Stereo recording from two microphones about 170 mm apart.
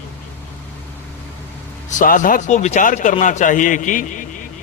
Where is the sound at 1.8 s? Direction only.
50° left (ahead or behind).